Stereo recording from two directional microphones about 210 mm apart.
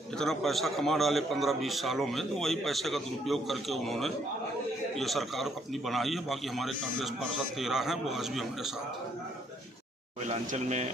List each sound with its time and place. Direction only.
0.2 s a man's voice: centre (ahead or behind)
10.2 s speech: 35° right (ahead or behind)